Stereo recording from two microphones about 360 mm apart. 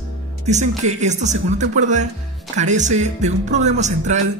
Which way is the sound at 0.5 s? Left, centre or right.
Centre.